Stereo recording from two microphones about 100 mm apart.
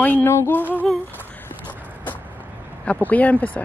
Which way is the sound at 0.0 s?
20° left (ahead or behind).